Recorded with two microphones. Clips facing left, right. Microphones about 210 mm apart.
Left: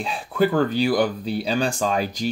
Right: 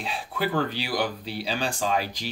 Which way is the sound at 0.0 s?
45° left (ahead or behind).